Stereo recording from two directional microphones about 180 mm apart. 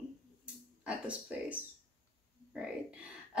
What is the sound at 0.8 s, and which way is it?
Speech, 5° right (ahead or behind).